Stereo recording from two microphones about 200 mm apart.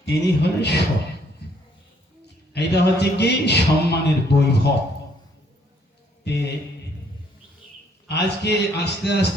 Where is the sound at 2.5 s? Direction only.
55° left (ahead or behind).